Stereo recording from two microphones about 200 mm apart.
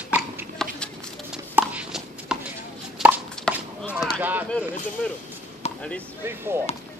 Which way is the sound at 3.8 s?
Centre (ahead or behind).